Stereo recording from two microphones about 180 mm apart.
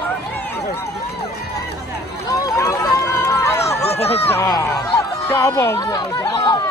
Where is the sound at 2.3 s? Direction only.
15° left (ahead or behind).